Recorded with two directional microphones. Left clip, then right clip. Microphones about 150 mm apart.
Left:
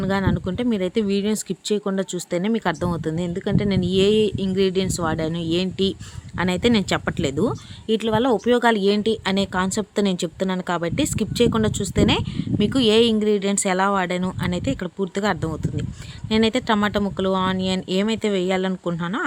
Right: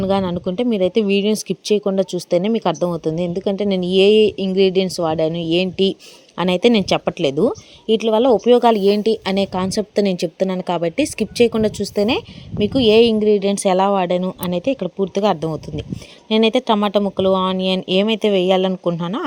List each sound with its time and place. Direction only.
0.0 s speech: 10° right (ahead or behind)
11.9 s speech: 45° left (ahead or behind)
12.5 s speech: 5° right (ahead or behind)